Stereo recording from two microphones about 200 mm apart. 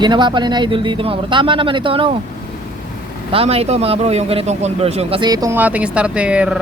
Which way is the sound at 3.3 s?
30° right (ahead or behind).